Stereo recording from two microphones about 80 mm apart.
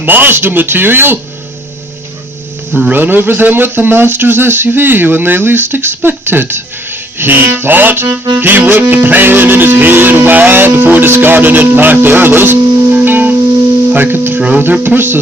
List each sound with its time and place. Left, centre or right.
0.0 s speech: right
2.7 s speech: right
13.9 s music: right
14.6 s speech: right